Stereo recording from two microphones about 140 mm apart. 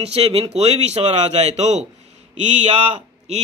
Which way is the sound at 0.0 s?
45° right (ahead or behind).